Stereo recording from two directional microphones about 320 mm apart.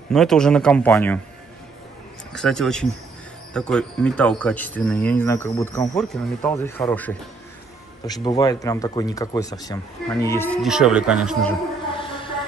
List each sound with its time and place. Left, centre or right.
0.1 s speech: centre
2.3 s speech: centre
11.9 s music: centre